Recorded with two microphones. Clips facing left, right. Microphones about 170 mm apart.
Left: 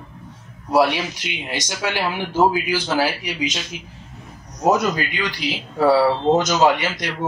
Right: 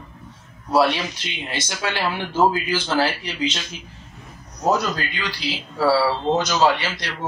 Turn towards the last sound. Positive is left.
turn(degrees=20)  # may be behind; listen again after turning